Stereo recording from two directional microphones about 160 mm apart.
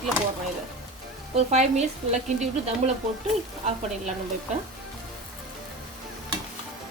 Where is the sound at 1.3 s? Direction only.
45° right (ahead or behind).